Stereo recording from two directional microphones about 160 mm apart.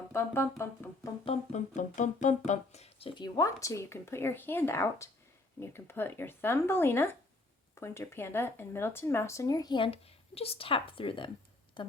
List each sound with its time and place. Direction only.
0.1 s speech: 15° left (ahead or behind)
1.2 s speech: 45° left (ahead or behind)
3.2 s speech: 25° left (ahead or behind)